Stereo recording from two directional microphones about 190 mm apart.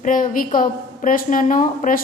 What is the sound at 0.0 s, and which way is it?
A woman's voice, 45° left (ahead or behind).